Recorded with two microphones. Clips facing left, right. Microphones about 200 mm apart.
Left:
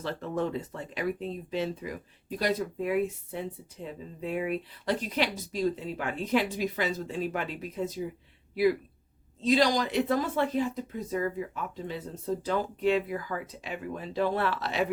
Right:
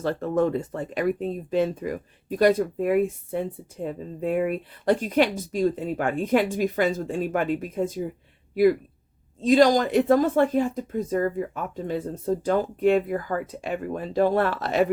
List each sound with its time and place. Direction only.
0.0 s speech: 50° right (ahead or behind)
9.4 s speech: 50° right (ahead or behind)